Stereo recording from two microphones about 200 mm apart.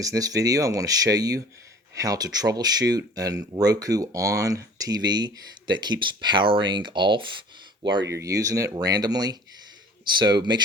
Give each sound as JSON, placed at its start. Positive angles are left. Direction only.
{"t": 0.0, "sound": "speech", "side_deg": -15}